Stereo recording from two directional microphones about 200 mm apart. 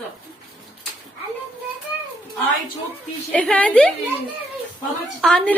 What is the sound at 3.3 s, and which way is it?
Speech, 5° left (ahead or behind).